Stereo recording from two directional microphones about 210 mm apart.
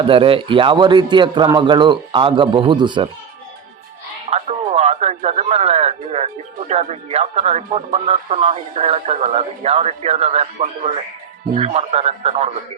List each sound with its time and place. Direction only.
0.0 s speech: 25° right (ahead or behind)
4.3 s speech: 30° right (ahead or behind)